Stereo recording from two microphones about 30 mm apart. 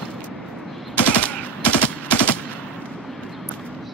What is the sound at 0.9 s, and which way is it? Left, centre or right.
Machine gun, left.